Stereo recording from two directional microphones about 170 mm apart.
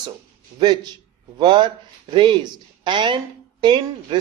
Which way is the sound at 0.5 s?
25° right (ahead or behind).